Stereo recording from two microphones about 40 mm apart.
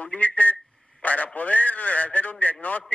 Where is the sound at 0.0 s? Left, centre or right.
Left.